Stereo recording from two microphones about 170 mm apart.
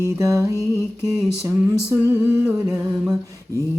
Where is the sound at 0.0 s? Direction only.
20° right (ahead or behind).